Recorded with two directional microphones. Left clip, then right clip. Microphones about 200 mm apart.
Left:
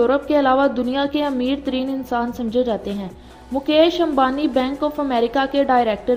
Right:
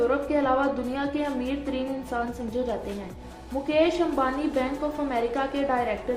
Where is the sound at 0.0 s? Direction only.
35° left (ahead or behind).